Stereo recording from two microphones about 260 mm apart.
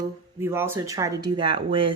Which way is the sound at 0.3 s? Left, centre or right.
Centre.